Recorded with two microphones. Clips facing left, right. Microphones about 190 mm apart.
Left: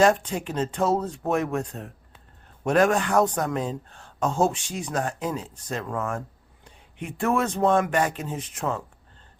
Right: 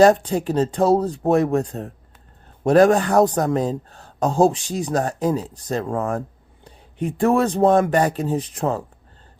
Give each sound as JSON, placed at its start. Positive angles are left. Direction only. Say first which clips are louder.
{"t": 0.0, "sound": "speech", "louder": "right 6 dB", "side_deg": -35}